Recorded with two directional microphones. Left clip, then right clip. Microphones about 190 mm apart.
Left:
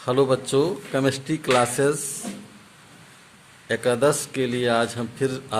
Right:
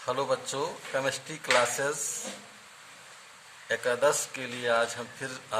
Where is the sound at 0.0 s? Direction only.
45° left (ahead or behind).